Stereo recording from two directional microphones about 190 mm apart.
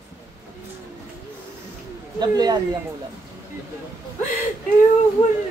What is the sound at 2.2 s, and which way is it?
Speech, 20° right (ahead or behind).